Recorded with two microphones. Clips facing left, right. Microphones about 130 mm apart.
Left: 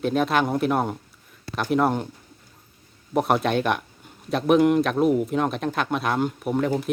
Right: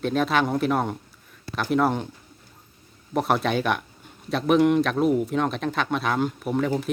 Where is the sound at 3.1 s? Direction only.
Centre (ahead or behind).